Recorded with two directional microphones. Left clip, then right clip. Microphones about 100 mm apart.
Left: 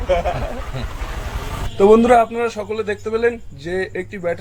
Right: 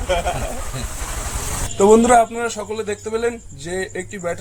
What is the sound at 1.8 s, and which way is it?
A man's voice, 30° right (ahead or behind).